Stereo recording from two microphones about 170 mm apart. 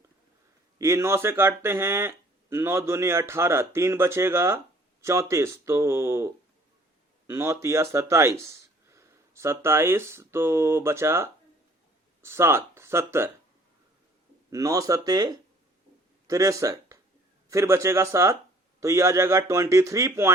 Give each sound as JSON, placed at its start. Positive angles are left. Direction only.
{"t": 0.8, "sound": "speech", "side_deg": -15}
{"t": 14.5, "sound": "speech", "side_deg": -20}